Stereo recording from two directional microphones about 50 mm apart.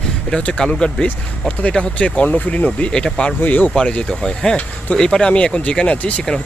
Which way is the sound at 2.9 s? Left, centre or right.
Centre.